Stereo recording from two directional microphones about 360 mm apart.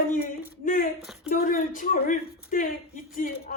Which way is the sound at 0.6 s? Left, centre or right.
Left.